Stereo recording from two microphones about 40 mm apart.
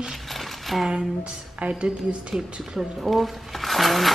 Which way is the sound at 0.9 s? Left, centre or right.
Right.